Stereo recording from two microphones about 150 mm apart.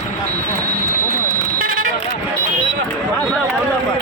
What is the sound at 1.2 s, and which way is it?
Vehicle, 65° right (ahead or behind).